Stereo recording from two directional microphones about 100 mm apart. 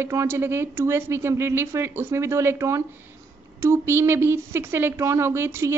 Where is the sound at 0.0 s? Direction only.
25° right (ahead or behind).